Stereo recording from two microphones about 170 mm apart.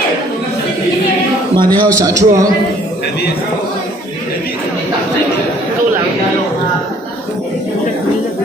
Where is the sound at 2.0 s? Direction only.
20° right (ahead or behind).